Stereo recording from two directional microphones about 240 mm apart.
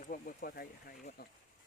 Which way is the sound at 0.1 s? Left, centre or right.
Left.